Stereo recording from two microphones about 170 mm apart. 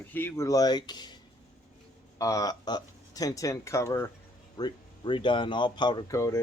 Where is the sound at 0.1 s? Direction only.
15° left (ahead or behind).